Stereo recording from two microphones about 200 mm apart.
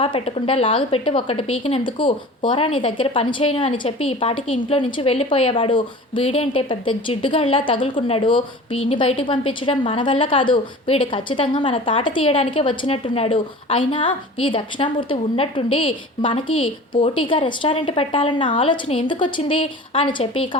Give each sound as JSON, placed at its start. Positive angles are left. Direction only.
{"t": 0.0, "sound": "a woman's voice", "side_deg": 30}